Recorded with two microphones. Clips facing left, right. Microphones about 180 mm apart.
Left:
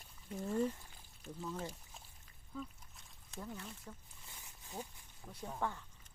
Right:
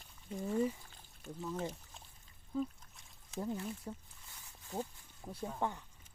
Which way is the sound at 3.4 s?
30° right (ahead or behind).